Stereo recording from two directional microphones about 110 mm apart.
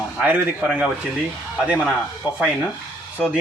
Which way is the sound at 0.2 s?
15° right (ahead or behind).